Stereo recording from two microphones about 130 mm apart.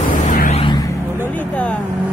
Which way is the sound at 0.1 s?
80° left.